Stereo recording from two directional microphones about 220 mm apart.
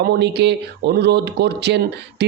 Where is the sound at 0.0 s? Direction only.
50° right (ahead or behind).